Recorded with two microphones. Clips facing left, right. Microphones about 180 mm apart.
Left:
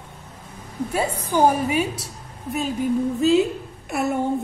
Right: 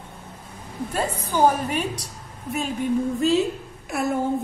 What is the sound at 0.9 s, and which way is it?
A woman's voice, 10° left (ahead or behind).